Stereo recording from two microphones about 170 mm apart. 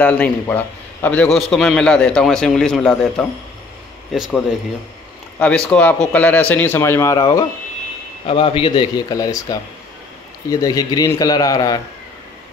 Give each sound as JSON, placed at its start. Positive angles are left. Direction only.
{"t": 0.0, "sound": "a man's voice", "side_deg": 10}
{"t": 5.7, "sound": "a man's voice", "side_deg": 10}
{"t": 8.3, "sound": "speech", "side_deg": 30}